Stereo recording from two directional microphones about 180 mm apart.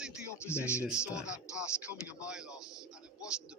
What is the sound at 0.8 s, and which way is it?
A man's voice, 5° right (ahead or behind).